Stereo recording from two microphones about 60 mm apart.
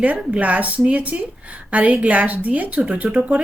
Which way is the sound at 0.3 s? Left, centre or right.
Right.